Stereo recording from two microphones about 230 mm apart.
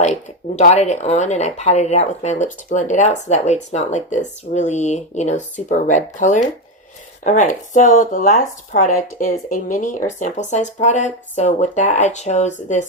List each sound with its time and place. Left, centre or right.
0.5 s speech: left